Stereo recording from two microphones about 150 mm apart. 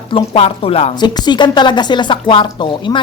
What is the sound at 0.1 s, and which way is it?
Speech, 40° left (ahead or behind).